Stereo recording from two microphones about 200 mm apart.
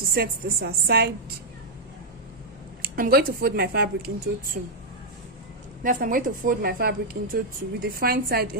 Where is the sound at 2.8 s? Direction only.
45° right (ahead or behind).